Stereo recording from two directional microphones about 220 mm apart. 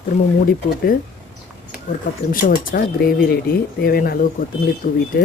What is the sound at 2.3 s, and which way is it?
Speech, 40° left (ahead or behind).